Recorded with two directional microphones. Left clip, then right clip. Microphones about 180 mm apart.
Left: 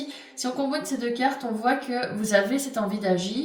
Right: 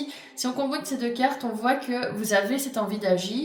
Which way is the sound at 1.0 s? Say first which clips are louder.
Right 1 dB; 45° right (ahead or behind).